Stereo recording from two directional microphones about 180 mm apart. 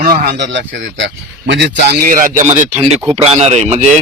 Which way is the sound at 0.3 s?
80° right.